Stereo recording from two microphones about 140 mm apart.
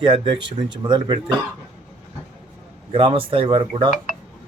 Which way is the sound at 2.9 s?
40° right (ahead or behind).